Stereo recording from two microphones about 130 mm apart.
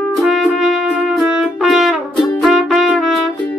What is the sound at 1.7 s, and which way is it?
Brass instrument, centre (ahead or behind).